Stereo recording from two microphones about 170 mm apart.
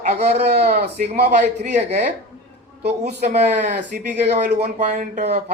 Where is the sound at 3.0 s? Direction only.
40° right (ahead or behind).